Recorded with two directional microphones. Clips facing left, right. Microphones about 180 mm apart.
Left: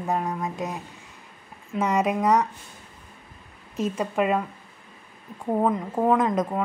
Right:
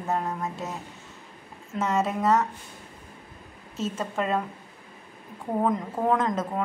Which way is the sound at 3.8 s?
15° left (ahead or behind).